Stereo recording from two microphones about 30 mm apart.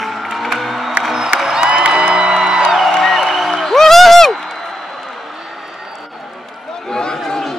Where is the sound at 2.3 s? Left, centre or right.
Centre.